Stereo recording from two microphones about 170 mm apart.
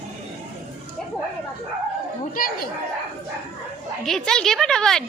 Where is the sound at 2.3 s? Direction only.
60° left (ahead or behind).